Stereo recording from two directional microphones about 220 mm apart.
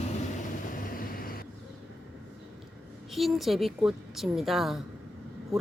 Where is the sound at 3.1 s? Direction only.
Centre (ahead or behind).